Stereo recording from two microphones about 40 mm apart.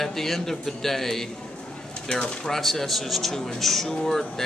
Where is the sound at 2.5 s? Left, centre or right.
Centre.